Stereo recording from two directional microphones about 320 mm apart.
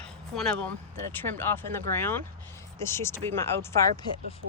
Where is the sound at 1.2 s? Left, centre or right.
Centre.